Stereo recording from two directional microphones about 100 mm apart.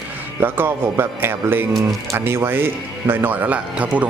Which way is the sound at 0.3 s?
20° right (ahead or behind).